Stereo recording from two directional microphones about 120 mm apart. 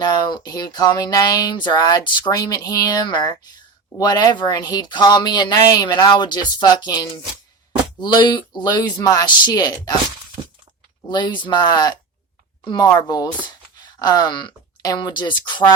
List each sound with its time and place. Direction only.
0.0 s speech: 40° left (ahead or behind)
11.1 s speech: 40° left (ahead or behind)